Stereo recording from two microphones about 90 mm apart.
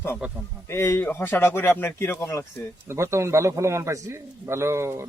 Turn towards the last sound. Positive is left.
turn(degrees=-30)  # may be behind; listen again after turning